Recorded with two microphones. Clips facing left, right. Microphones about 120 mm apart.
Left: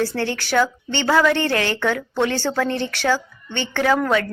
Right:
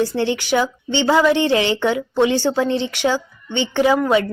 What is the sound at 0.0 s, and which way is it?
A woman's voice, 15° right (ahead or behind).